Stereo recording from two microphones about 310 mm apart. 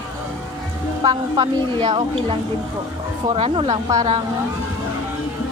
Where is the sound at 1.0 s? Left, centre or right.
Centre.